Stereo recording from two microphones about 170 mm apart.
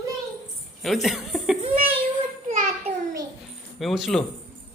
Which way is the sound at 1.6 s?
35° right (ahead or behind).